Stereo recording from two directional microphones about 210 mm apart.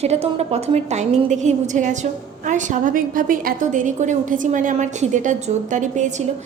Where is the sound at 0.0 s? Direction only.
30° right (ahead or behind).